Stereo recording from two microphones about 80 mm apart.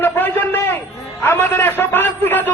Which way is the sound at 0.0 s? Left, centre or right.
Left.